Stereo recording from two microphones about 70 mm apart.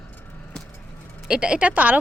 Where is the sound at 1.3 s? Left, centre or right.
Centre.